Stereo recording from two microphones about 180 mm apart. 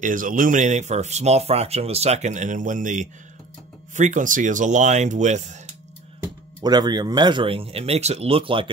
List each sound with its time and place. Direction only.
0.0 s speech: 50° right (ahead or behind)
6.6 s speech: 20° right (ahead or behind)